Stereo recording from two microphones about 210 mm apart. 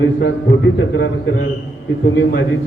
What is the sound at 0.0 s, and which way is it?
Speech, 55° left (ahead or behind).